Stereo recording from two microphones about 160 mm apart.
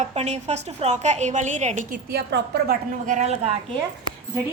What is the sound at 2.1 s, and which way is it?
Speech, 75° right (ahead or behind).